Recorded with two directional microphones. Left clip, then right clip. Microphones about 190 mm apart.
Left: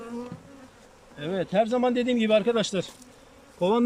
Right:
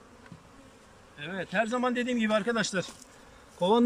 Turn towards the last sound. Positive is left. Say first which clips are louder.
# left 1 dB
turn(degrees=10)  # may be behind; listen again after turning